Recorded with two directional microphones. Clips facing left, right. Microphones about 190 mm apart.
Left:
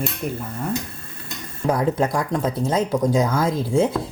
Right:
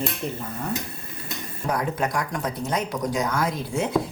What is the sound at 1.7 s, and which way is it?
Speech, 25° left (ahead or behind).